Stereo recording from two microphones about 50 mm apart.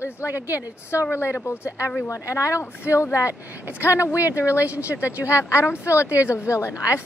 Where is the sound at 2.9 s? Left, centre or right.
Left.